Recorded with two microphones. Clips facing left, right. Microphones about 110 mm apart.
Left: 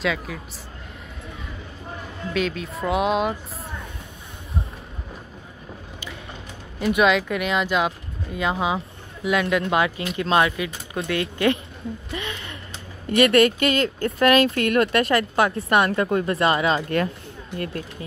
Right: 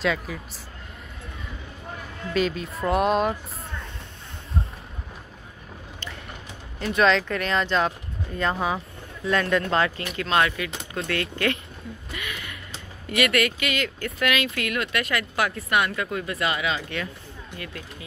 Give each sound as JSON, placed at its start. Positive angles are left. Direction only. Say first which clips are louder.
{"t": 0.0, "sound": "speech", "louder": "even", "side_deg": 0}
{"t": 2.3, "sound": "speech", "louder": "right 1 dB", "side_deg": 0}
{"t": 7.0, "sound": "speech", "louder": "even", "side_deg": 10}
{"t": 12.1, "sound": "a sound", "louder": "left 4 dB", "side_deg": 30}
{"t": 13.1, "sound": "speech", "louder": "left 7 dB", "side_deg": 30}